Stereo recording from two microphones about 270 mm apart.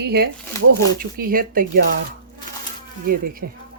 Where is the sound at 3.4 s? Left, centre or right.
Right.